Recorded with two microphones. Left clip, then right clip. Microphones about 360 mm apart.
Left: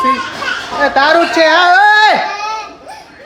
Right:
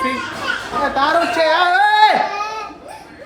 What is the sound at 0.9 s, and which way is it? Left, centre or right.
Speech, centre.